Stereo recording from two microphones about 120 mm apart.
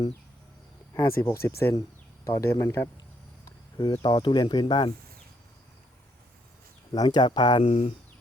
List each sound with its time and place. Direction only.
1.0 s speech: 20° left (ahead or behind)
3.8 s speech: 35° left (ahead or behind)
6.9 s speech: 35° left (ahead or behind)
7.6 s speech: 60° left (ahead or behind)